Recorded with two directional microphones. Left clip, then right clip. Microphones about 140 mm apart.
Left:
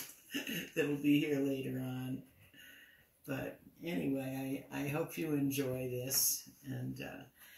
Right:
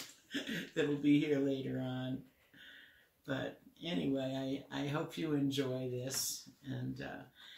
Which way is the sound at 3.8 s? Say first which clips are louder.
Right 1 dB; 5° right (ahead or behind).